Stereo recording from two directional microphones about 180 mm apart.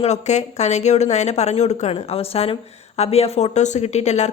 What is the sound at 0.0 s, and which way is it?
Speech, 40° left (ahead or behind).